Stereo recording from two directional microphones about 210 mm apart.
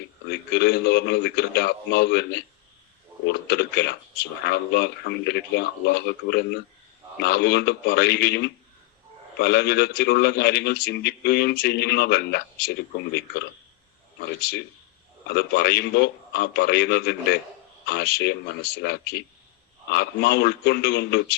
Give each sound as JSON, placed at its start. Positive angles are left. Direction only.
{"t": 0.3, "sound": "a man's voice", "side_deg": 50}